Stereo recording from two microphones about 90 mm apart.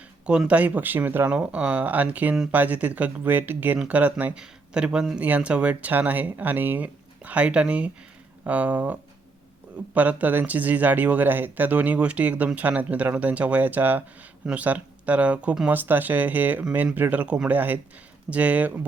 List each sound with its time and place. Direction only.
0.3 s speech: 10° right (ahead or behind)